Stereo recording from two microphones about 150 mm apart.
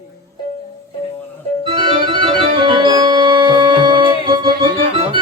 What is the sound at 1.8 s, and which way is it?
Organ, 35° right (ahead or behind).